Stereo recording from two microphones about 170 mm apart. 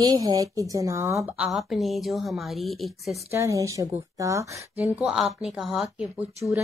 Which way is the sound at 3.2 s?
15° right (ahead or behind).